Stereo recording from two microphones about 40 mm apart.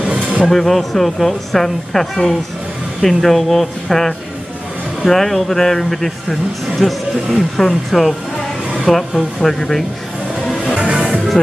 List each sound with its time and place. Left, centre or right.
0.0 s a sound: centre
0.5 s speech: centre
6.9 s speech: centre
10.6 s music: right